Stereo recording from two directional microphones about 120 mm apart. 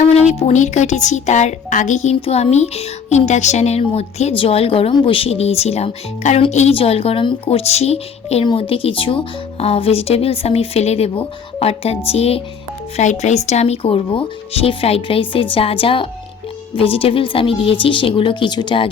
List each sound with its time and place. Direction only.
0.1 s speech: 60° left (ahead or behind); by 2.1 s 85° left
2.2 s speech: 60° left (ahead or behind)
8.4 s speech: 50° left (ahead or behind)
13.0 s speech: 75° left (ahead or behind); by 18.9 s 45° left (ahead or behind)